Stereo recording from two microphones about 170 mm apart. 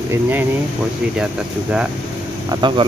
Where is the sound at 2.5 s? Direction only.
25° right (ahead or behind).